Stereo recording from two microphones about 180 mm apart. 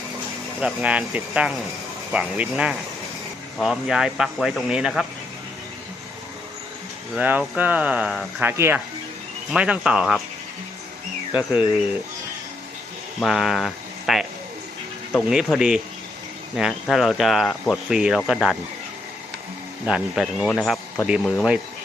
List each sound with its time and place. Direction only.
0.6 s speech: 5° right (ahead or behind)
7.2 s speech: 10° right (ahead or behind)
11.3 s speech: 10° right (ahead or behind)
13.1 s speech: centre (ahead or behind)
15.3 s speech: 5° right (ahead or behind)
19.8 s speech: 5° right (ahead or behind)